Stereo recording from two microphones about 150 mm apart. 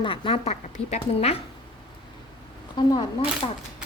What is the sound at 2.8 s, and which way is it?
Speech, 30° left (ahead or behind).